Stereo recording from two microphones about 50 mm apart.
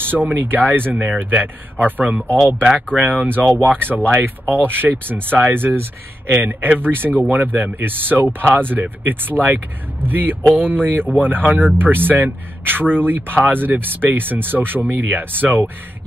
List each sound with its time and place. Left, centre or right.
0.0 s speech: right
0.9 s speech: centre
1.3 s speech: right
3.3 s speech: right